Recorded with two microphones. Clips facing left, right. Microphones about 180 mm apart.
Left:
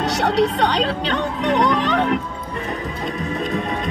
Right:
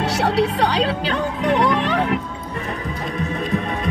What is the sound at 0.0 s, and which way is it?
Speech, 5° right (ahead or behind).